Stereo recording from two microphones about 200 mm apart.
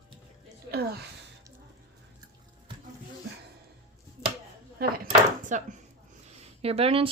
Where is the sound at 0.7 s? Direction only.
50° right (ahead or behind).